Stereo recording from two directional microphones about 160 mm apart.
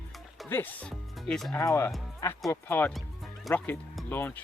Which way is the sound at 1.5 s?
15° left (ahead or behind).